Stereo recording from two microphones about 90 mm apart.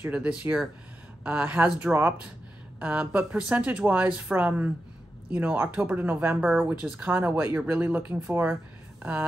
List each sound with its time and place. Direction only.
0.1 s speech: 10° right (ahead or behind)